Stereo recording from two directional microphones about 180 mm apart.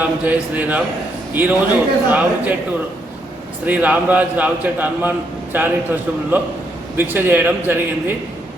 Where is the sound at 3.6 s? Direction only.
10° right (ahead or behind).